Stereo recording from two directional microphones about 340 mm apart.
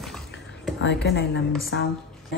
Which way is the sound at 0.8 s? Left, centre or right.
Left.